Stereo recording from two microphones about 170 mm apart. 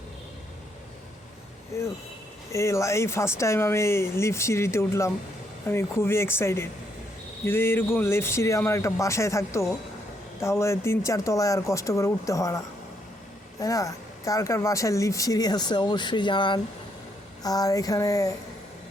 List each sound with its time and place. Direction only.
1.7 s speech: 15° left (ahead or behind)
13.6 s speech: 20° left (ahead or behind)